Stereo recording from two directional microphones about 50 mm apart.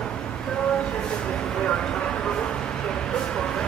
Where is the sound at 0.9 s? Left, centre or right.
Centre.